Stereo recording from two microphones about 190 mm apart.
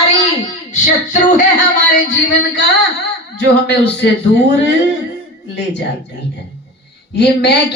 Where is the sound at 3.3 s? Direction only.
65° left (ahead or behind).